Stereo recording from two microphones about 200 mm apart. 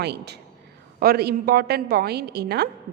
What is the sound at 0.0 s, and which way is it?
A woman's voice, 55° right (ahead or behind).